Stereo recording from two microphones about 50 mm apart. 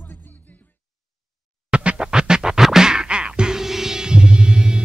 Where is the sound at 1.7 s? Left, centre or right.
Centre.